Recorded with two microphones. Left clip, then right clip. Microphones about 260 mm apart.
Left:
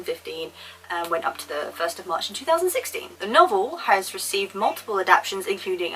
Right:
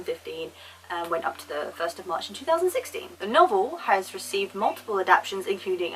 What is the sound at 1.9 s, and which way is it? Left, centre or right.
Speech, centre.